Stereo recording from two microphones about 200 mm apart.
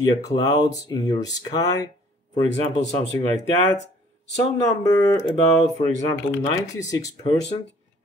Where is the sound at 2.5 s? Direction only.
65° left (ahead or behind).